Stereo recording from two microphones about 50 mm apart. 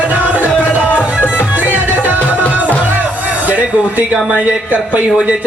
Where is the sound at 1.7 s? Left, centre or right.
Right.